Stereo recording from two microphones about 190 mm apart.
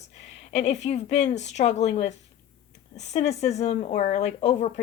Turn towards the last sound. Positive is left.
turn(degrees=35)  # may be behind; listen again after turning